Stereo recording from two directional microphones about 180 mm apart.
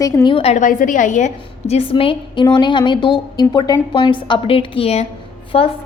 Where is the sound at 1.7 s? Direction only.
30° left (ahead or behind).